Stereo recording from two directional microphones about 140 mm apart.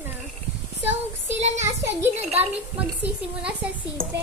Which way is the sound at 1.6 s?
20° right (ahead or behind).